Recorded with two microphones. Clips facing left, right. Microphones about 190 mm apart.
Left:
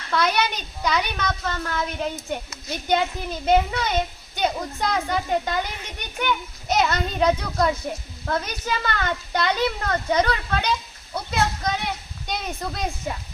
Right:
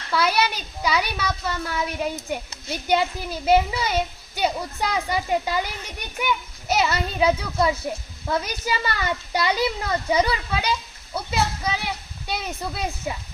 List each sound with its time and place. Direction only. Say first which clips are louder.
0.1 s a woman's voice: even; 5° right (ahead or behind)